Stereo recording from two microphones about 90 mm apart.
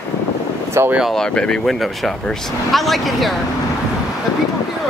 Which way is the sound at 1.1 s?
10° left (ahead or behind).